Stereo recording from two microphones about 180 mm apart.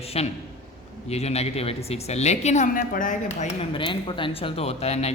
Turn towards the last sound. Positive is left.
turn(degrees=35)  # may be behind; listen again after turning